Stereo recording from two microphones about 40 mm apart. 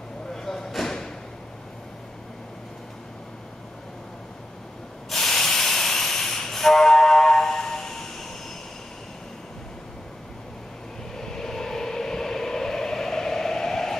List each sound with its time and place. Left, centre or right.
0.3 s vehicle: centre
0.7 s a sound: centre
5.1 s train: centre
11.1 s vehicle: centre